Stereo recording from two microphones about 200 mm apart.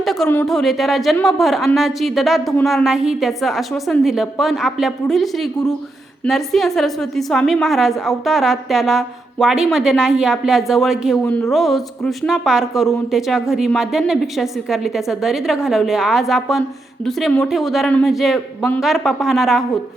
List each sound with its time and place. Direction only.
0.0 s a woman's voice: centre (ahead or behind)